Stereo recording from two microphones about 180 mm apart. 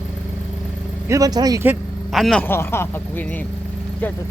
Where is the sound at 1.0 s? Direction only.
20° right (ahead or behind).